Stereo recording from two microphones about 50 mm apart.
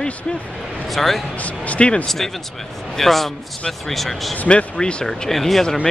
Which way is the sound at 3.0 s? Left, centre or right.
Centre.